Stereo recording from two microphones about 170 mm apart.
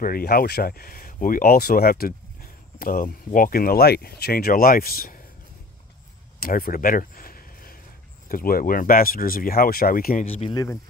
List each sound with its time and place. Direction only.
0.0 s speech: 60° left (ahead or behind)
6.4 s a sound: 60° left (ahead or behind)
8.3 s speech: 55° left (ahead or behind)
10.2 s speech: 35° left (ahead or behind)
10.5 s speech: 20° left (ahead or behind)